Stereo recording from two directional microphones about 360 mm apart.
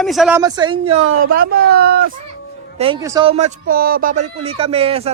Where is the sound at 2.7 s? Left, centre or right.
Centre.